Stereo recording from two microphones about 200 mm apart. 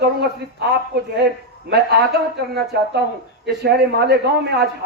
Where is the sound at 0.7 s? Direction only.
55° right (ahead or behind).